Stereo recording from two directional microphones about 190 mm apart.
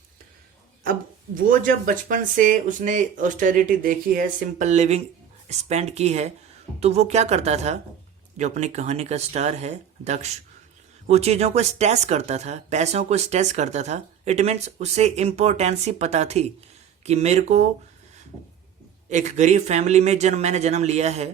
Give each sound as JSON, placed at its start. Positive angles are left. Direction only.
{"t": 1.4, "sound": "speech", "side_deg": -45}
{"t": 19.0, "sound": "speech", "side_deg": -40}